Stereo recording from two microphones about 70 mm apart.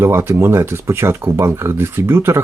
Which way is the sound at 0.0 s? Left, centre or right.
Right.